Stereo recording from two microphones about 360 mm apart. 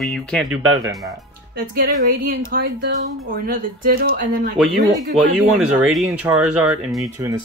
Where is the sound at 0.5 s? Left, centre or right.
Right.